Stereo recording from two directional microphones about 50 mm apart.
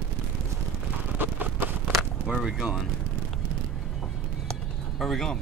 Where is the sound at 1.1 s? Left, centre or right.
Right.